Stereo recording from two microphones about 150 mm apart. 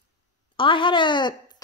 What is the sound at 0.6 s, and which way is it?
Speech, 35° left (ahead or behind).